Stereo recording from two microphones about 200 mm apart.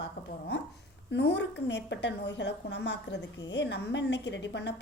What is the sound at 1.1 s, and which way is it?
A woman's voice, 60° left (ahead or behind).